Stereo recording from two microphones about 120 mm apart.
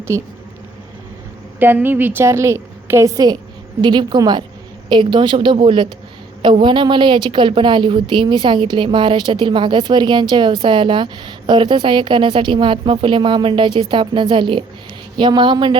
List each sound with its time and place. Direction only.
0.1 s a woman's voice: 25° right (ahead or behind)
1.5 s a woman's voice: 15° right (ahead or behind)
3.8 s a woman's voice: 40° right (ahead or behind)